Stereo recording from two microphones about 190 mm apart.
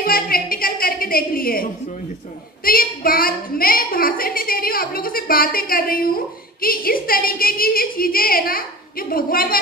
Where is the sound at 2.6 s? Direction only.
50° left (ahead or behind).